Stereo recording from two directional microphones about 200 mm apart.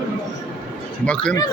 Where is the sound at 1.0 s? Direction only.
5° left (ahead or behind).